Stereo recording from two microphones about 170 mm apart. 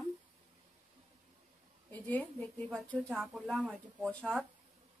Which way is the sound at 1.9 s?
10° left (ahead or behind).